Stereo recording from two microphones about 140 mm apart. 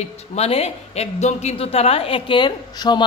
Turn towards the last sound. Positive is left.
turn(degrees=30)  # may be behind; listen again after turning